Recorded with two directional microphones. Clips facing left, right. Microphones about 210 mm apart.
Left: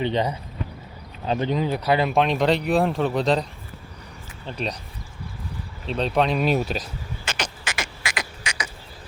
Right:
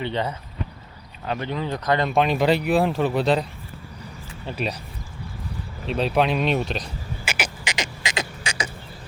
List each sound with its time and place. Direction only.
0.0 s speech: 15° left (ahead or behind); by 3.4 s centre (ahead or behind)
4.4 s speech: 5° right (ahead or behind)
5.8 s speech: 5° right (ahead or behind)
7.3 s a sound: 10° right (ahead or behind); by 8.7 s 25° right (ahead or behind)